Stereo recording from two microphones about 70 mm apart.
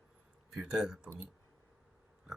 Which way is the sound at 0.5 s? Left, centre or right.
Centre.